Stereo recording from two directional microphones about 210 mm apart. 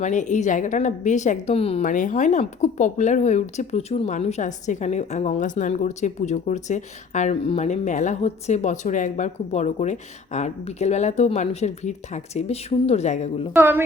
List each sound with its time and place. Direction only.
0.0 s a woman's voice: 35° left (ahead or behind)
13.5 s a woman's voice: 10° right (ahead or behind)